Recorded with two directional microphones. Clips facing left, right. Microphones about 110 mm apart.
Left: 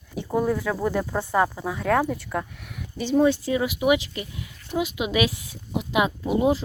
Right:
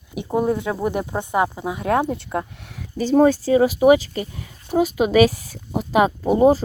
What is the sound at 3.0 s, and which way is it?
Speech, 45° right (ahead or behind).